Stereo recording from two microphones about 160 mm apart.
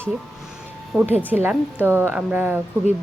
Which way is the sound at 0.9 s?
15° right (ahead or behind).